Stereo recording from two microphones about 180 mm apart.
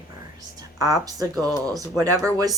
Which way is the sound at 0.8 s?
20° right (ahead or behind).